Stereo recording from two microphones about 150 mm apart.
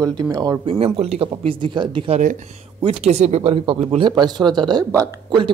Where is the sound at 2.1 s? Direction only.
60° right (ahead or behind).